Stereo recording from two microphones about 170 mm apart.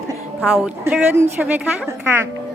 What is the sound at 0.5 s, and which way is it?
A woman's voice, 5° right (ahead or behind).